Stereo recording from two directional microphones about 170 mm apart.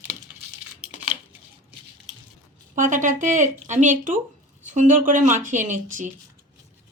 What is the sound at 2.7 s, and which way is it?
Speech, 50° right (ahead or behind).